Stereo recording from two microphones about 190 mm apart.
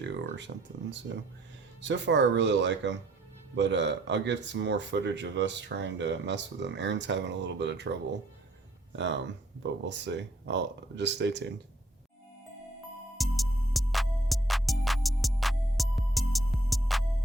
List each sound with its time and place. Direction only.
0.0 s speech: 70° right (ahead or behind)
9.0 s speech: 70° right (ahead or behind)
13.1 s music: centre (ahead or behind)